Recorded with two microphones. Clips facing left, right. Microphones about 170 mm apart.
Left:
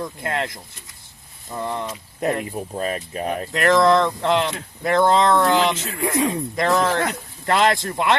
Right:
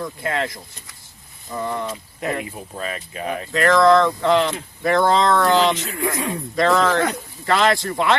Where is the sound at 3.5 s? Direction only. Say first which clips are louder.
Right 2 dB; 20° left (ahead or behind).